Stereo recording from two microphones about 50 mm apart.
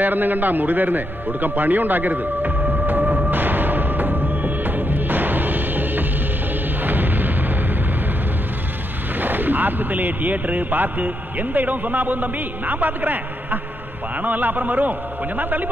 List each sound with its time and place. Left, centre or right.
0.0 s music: right
6.8 s artillery fire: right
9.2 s speech: right